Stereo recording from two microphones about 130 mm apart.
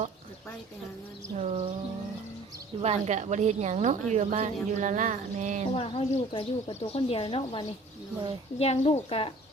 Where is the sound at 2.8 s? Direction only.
55° right (ahead or behind).